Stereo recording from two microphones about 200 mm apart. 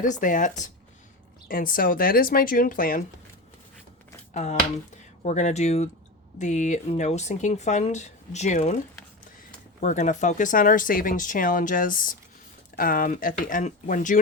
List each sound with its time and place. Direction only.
0.0 s speech: 40° left (ahead or behind)
4.2 s finger snapping: 35° left (ahead or behind)
5.2 s speech: 35° left (ahead or behind)
9.8 s speech: 35° left (ahead or behind)